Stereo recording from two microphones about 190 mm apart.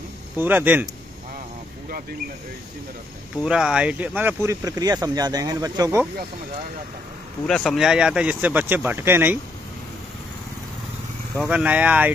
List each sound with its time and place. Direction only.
0.4 s speech: 10° right (ahead or behind)
3.4 s speech: 5° right (ahead or behind)
7.4 s speech: centre (ahead or behind)
11.3 s speech: 5° right (ahead or behind)